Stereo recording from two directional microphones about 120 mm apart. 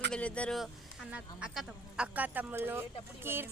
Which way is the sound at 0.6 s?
Centre (ahead or behind).